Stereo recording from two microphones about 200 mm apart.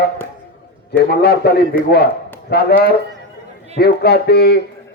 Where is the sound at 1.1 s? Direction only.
55° left (ahead or behind).